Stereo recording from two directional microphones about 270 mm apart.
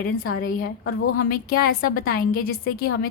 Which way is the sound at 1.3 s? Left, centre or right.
Left.